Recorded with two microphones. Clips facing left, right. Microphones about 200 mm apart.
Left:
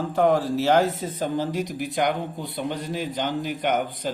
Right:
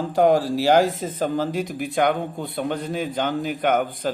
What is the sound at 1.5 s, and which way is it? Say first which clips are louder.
A man's voice: right 2 dB; 55° right (ahead or behind).